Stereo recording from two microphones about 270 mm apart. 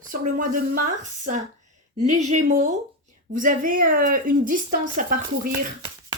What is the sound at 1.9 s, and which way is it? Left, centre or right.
Speech, right.